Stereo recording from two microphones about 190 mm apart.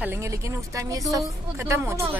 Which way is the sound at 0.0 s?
15° right (ahead or behind).